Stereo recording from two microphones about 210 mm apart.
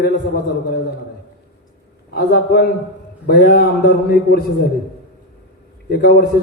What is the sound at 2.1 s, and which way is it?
A man's voice, 50° left (ahead or behind).